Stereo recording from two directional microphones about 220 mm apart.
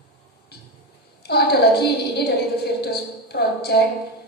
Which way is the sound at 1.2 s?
45° left (ahead or behind).